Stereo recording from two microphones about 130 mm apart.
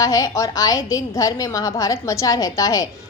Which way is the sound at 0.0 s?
25° left (ahead or behind).